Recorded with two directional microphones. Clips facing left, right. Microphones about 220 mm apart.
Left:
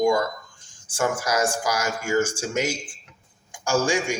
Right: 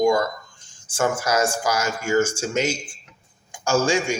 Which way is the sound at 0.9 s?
15° left (ahead or behind).